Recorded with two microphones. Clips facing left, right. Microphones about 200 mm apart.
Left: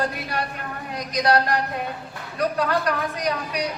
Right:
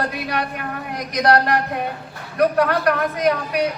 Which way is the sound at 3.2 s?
55° right (ahead or behind).